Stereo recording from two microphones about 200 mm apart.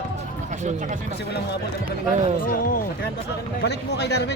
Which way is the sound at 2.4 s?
45° left (ahead or behind).